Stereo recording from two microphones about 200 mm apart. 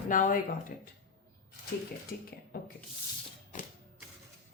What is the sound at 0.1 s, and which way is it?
Speech, 40° left (ahead or behind).